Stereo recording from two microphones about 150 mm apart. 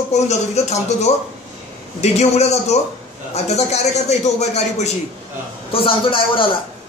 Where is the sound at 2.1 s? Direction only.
45° left (ahead or behind).